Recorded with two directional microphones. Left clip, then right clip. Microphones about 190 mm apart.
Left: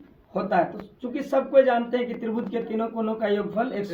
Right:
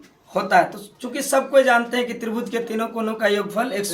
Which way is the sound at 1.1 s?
Centre (ahead or behind).